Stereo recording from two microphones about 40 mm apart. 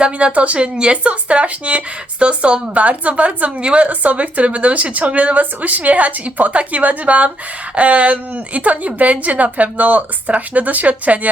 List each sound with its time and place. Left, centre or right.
0.0 s speech: right